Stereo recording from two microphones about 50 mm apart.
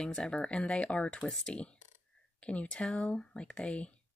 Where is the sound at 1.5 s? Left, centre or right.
Left.